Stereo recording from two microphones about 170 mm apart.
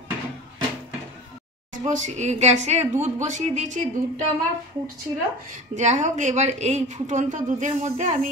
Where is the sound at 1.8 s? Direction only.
45° right (ahead or behind).